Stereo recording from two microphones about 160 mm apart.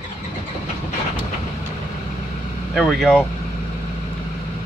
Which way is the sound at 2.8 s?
5° left (ahead or behind).